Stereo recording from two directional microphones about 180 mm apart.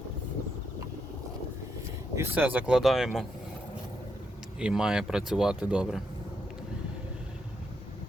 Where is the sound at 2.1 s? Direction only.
10° right (ahead or behind).